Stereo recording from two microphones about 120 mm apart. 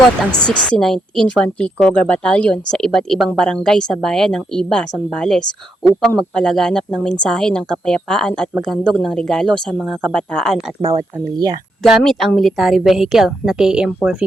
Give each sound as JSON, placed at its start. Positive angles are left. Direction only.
{"t": 0.4, "sound": "a woman's voice", "side_deg": 10}
{"t": 10.9, "sound": "speech", "side_deg": -35}
{"t": 11.9, "sound": "speech", "side_deg": 0}